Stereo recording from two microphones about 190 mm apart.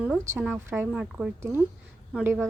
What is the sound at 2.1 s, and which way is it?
Speech, 10° right (ahead or behind).